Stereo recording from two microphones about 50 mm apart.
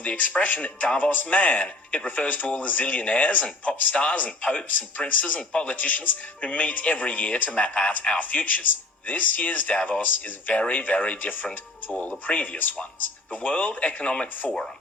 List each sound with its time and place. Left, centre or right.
0.0 s speech: left